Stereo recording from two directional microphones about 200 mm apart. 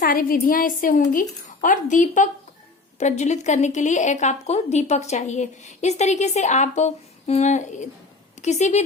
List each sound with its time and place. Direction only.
0.0 s a woman's voice: 45° left (ahead or behind)